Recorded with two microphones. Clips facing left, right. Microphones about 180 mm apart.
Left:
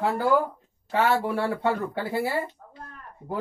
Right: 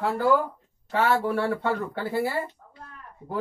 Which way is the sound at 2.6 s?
45° left (ahead or behind).